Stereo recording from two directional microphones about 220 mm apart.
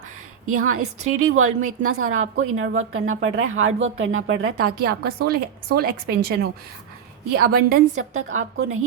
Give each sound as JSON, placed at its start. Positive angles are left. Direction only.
{"t": 0.4, "sound": "a woman's voice", "side_deg": -75}
{"t": 4.8, "sound": "a woman's voice", "side_deg": -45}
{"t": 8.1, "sound": "a woman's voice", "side_deg": -70}